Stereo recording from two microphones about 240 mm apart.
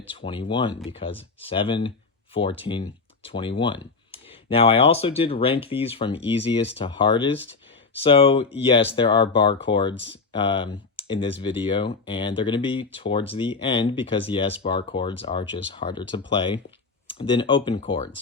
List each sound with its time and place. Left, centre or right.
0.1 s speech: left